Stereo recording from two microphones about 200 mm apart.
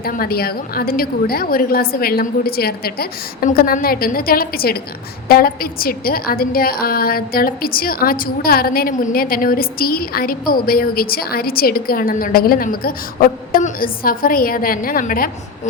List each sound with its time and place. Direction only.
0.0 s a woman's voice: 50° left (ahead or behind)